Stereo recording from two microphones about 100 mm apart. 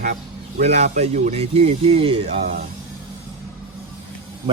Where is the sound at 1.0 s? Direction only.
90° right; by 2.4 s 70° right (ahead or behind).